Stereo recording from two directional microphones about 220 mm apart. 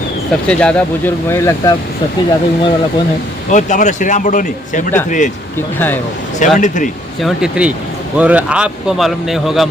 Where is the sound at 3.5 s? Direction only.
35° left (ahead or behind).